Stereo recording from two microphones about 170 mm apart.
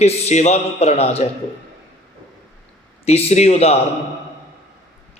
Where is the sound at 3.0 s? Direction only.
35° left (ahead or behind).